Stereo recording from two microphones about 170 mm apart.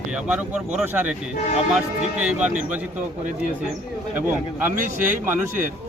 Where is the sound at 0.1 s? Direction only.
5° right (ahead or behind).